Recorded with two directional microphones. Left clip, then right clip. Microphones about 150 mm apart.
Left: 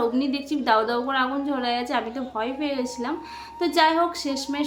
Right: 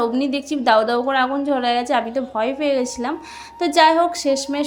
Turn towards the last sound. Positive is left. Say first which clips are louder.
# right 8 dB
turn(degrees=-40)  # may be behind; listen again after turning